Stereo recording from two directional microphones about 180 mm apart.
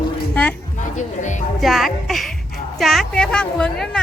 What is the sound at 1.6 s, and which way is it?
A woman's voice, centre (ahead or behind).